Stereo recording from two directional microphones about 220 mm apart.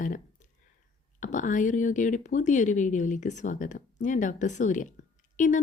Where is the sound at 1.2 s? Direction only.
35° left (ahead or behind).